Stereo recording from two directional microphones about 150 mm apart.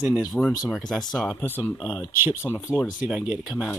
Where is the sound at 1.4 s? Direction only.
15° left (ahead or behind).